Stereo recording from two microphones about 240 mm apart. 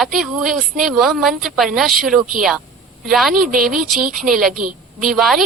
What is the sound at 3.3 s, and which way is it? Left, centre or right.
Speech, right.